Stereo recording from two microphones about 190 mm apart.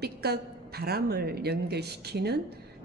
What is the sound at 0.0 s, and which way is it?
A woman's voice, 55° right (ahead or behind).